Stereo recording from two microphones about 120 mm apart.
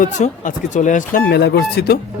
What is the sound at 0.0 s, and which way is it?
Speech, 90° left.